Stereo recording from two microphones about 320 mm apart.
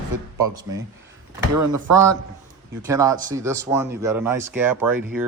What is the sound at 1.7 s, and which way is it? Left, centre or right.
Speech, right.